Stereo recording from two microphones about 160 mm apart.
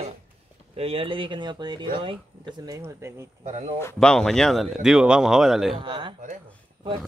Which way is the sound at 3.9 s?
5° left (ahead or behind).